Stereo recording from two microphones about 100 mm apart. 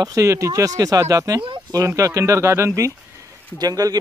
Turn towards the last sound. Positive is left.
turn(degrees=-40)  # may be behind; listen again after turning